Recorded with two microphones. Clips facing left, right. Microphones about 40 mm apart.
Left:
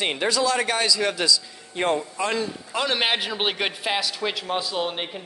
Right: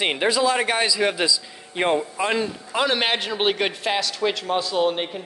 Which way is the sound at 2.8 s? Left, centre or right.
Centre.